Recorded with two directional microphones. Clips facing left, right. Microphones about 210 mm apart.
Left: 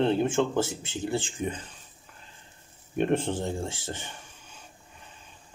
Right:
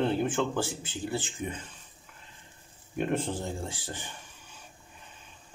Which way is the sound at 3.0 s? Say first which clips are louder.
Left 4 dB; 30° left (ahead or behind).